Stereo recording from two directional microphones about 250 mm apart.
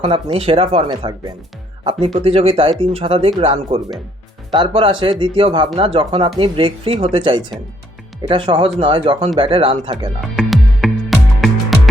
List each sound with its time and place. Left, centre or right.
0.0 s speech: right
10.3 s music: centre